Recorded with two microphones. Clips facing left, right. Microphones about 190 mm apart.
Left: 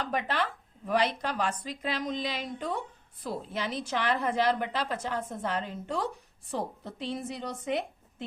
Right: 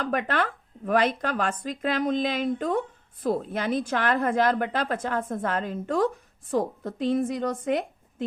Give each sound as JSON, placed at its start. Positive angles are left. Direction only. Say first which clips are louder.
{"t": 0.0, "sound": "speech", "louder": "right 4 dB", "side_deg": -55}